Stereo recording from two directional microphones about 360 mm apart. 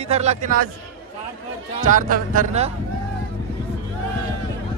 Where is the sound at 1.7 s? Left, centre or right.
Right.